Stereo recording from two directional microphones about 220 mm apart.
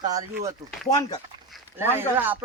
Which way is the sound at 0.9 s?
15° left (ahead or behind).